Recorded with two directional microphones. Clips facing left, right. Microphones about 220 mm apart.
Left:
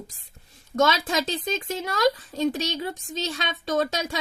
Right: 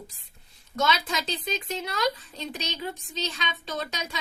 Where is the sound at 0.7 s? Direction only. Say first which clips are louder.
Left 5 dB; 45° left (ahead or behind).